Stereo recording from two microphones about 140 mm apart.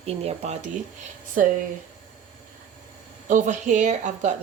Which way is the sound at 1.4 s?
70° right (ahead or behind).